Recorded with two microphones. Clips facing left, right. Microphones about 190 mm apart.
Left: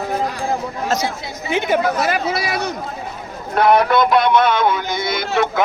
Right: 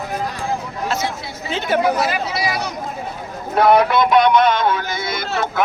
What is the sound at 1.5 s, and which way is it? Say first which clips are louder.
Speech: left 2 dB; 15° left (ahead or behind).